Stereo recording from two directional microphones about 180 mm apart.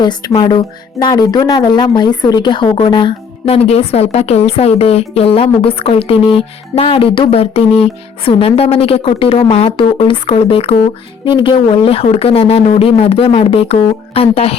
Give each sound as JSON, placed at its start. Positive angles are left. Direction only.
{"t": 0.0, "sound": "speech", "side_deg": 25}